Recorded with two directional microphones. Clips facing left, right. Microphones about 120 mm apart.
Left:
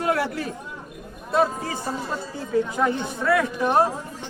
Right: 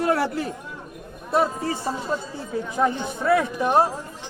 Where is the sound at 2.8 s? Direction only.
20° right (ahead or behind).